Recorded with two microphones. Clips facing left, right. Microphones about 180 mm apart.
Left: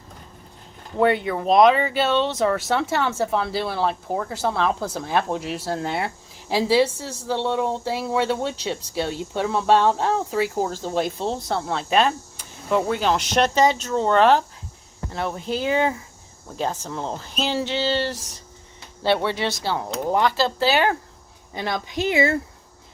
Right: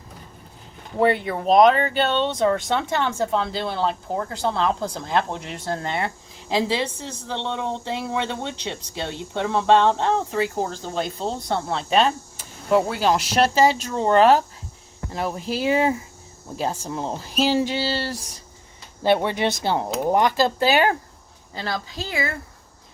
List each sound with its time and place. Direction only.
0.9 s a woman's voice: centre (ahead or behind)
21.5 s a woman's voice: 20° left (ahead or behind)